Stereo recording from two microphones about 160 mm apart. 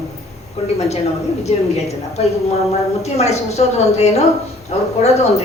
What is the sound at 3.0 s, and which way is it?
Speech, 45° left (ahead or behind).